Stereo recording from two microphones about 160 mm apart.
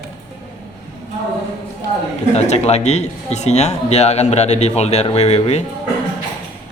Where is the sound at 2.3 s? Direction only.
45° left (ahead or behind).